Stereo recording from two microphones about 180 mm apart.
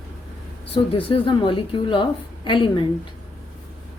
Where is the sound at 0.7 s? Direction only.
30° left (ahead or behind).